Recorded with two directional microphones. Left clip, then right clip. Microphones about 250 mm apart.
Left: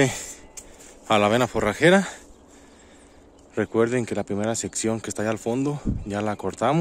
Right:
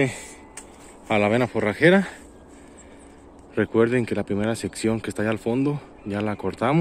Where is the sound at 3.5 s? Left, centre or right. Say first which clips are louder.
Right 2 dB; centre.